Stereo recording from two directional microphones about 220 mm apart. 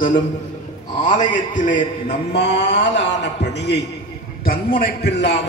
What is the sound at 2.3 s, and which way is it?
A man's voice, 50° left (ahead or behind).